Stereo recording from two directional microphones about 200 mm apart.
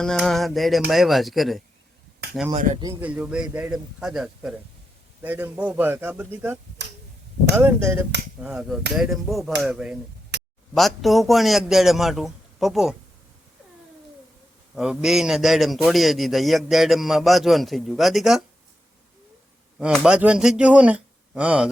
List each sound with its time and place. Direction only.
0.0 s a man's voice: 5° left (ahead or behind)
2.8 s a man's voice: 10° right (ahead or behind)
10.3 s a sound: 55° right (ahead or behind)
10.8 s a man's voice: centre (ahead or behind)
14.8 s a man's voice: centre (ahead or behind)
19.8 s a man's voice: 5° right (ahead or behind)